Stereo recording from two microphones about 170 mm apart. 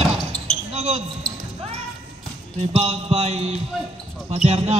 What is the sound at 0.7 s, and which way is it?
Basketball bounce, 40° right (ahead or behind).